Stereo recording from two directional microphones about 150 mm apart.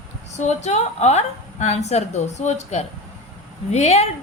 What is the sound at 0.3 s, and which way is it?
A woman's voice, 50° left (ahead or behind).